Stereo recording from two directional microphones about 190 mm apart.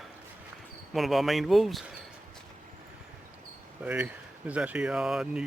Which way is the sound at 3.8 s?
10° right (ahead or behind).